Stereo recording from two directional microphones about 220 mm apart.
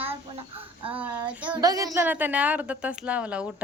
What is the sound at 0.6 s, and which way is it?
Speech, 25° right (ahead or behind).